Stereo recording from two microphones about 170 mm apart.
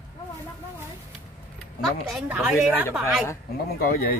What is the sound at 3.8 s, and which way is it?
Speech, 60° left (ahead or behind).